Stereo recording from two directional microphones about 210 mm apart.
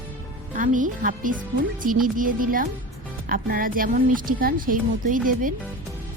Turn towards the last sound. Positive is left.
turn(degrees=-40)  # may be behind; listen again after turning